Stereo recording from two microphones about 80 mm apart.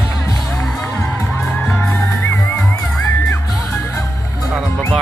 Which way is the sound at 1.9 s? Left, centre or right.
Centre.